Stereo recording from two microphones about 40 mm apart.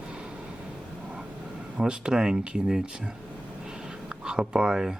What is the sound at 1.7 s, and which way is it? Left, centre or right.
Speech, right.